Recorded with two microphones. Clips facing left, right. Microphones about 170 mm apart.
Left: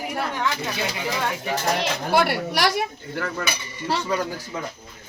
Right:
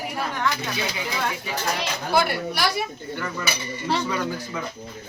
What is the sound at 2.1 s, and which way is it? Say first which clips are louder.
Speech: left 1 dB; 75° left (ahead or behind).